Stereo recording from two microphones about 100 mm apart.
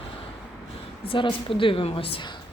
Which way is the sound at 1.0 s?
60° left (ahead or behind).